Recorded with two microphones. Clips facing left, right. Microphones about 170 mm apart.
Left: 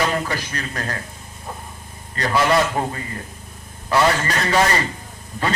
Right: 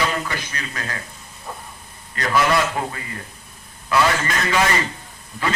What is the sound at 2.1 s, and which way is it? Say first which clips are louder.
Speech: left 1 dB; 30° left (ahead or behind).